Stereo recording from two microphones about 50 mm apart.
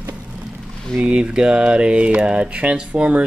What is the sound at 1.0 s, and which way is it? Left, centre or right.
Speech, centre.